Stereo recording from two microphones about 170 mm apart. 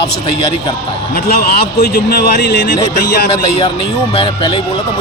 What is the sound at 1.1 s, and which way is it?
A man's voice, 65° left (ahead or behind).